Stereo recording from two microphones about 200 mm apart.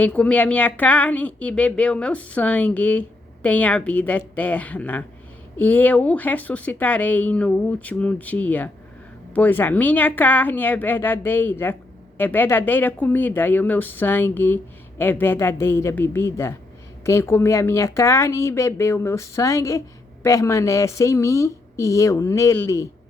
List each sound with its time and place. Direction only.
0.0 s speech: 5° left (ahead or behind)